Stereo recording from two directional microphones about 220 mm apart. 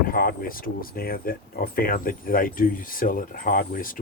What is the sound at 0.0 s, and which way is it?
Speech, 40° left (ahead or behind).